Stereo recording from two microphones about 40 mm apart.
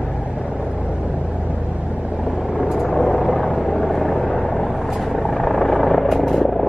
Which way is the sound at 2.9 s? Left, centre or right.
Centre.